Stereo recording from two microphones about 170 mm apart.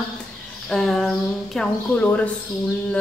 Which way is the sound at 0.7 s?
Centre (ahead or behind).